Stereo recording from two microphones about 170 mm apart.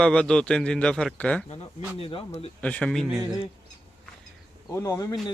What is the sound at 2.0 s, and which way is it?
Speech, 35° left (ahead or behind).